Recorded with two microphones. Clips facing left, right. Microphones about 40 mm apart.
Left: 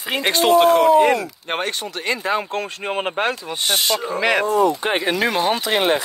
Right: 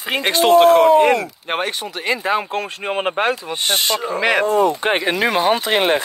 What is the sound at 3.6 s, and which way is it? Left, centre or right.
Speech, right.